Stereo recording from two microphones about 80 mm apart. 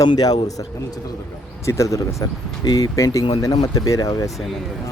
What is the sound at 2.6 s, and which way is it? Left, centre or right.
Speech, left.